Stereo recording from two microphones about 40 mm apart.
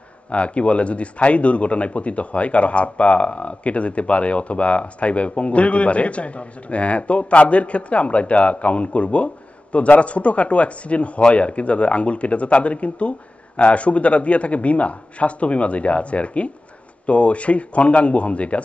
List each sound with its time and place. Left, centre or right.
0.3 s speech: left